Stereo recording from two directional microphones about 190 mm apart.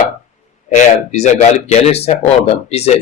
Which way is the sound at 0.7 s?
40° left (ahead or behind).